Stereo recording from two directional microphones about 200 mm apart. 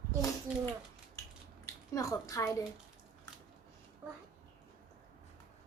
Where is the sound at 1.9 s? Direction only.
15° left (ahead or behind).